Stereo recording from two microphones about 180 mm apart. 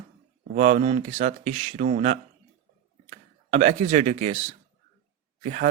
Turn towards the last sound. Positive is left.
turn(degrees=-40)  # may be behind; listen again after turning